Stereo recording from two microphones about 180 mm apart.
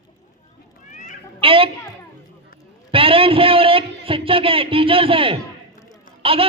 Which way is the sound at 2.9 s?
30° right (ahead or behind).